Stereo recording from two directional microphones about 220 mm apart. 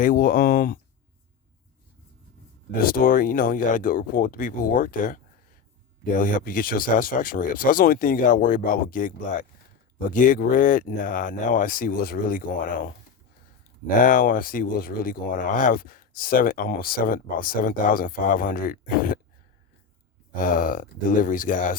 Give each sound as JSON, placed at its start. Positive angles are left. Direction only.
{"t": 0.0, "sound": "speech", "side_deg": 40}
{"t": 2.8, "sound": "speech", "side_deg": 40}
{"t": 20.3, "sound": "speech", "side_deg": 40}